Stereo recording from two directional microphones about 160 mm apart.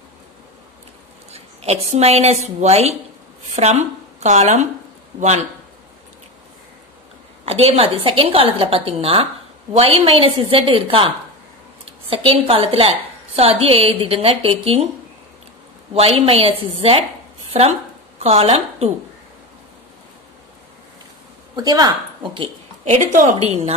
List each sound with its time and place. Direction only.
1.3 s a woman's voice: 40° right (ahead or behind)
7.4 s a woman's voice: 40° right (ahead or behind)
12.1 s a woman's voice: 35° right (ahead or behind)
15.9 s a woman's voice: 40° right (ahead or behind)
21.5 s a woman's voice: 25° right (ahead or behind)